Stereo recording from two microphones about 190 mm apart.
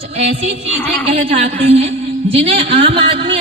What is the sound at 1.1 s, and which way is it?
A woman's voice, 40° right (ahead or behind).